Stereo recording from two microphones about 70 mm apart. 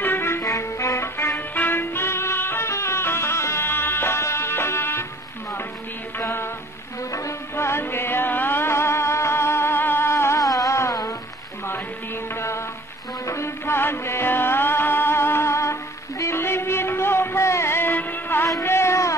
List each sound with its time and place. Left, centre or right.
0.0 s music: left
0.4 s music: left
6.1 s music: left
7.1 s music: left
10.4 s a sound: left
12.4 s music: left
18.6 s a sound: left